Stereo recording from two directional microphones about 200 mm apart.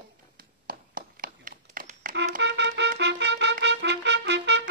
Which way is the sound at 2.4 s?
60° right (ahead or behind).